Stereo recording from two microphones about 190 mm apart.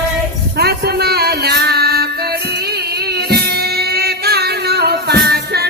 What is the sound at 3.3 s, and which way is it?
Music, 55° right (ahead or behind).